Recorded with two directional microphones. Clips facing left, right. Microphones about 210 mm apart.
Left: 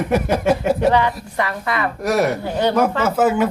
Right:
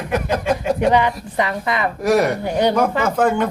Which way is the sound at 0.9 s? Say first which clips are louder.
Even; 15° right (ahead or behind).